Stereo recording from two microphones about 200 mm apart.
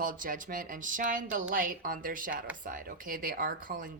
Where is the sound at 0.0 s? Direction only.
45° right (ahead or behind).